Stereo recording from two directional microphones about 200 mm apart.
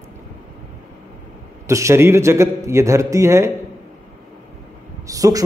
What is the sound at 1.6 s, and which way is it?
A man's voice, 15° right (ahead or behind).